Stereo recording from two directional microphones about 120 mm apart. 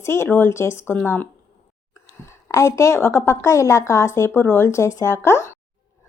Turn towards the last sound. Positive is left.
turn(degrees=20)  # may be behind; listen again after turning